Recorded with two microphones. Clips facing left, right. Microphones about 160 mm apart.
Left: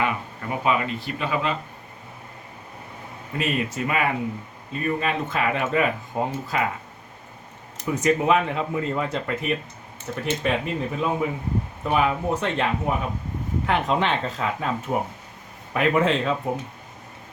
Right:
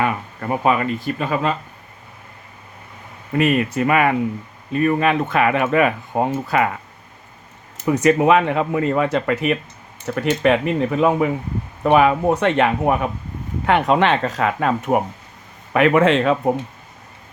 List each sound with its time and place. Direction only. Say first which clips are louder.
0.0 s speech: right 4 dB; 45° right (ahead or behind)
3.3 s speech: right 8 dB; 65° right (ahead or behind)
7.9 s speech: right 6 dB; 70° right (ahead or behind)